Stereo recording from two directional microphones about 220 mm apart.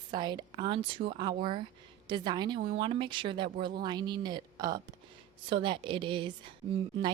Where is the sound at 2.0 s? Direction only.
20° right (ahead or behind).